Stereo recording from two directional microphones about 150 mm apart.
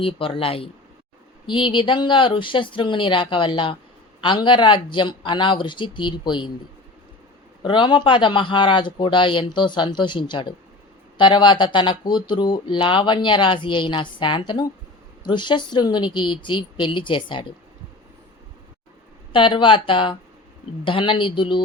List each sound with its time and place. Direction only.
0.0 s speech: 40° left (ahead or behind)
7.6 s speech: 30° left (ahead or behind)
19.3 s speech: 35° left (ahead or behind)